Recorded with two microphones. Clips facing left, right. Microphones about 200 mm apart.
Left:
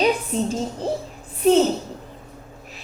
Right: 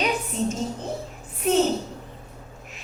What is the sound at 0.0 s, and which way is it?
Speech, 35° left (ahead or behind).